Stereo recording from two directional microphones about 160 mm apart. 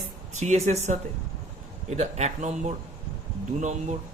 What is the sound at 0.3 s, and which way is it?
Speech, 45° right (ahead or behind).